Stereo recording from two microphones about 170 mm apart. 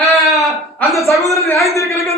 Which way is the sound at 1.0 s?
20° left (ahead or behind).